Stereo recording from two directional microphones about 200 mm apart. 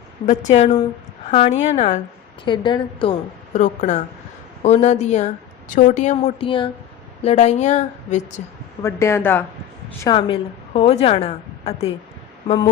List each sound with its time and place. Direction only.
0.3 s a woman's voice: 35° left (ahead or behind)
2.4 s a woman's voice: 25° left (ahead or behind)
3.5 s a woman's voice: 40° left (ahead or behind)
8.8 s speech: 15° left (ahead or behind)
10.0 s a woman's voice: 25° left (ahead or behind)